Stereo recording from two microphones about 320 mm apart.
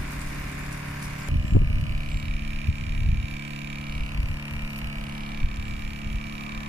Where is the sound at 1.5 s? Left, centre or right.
Left.